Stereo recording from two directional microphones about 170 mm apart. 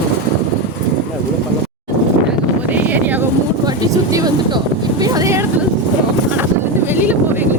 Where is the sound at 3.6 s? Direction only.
20° right (ahead or behind).